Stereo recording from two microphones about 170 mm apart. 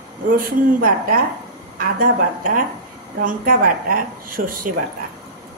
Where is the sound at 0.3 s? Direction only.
55° right (ahead or behind).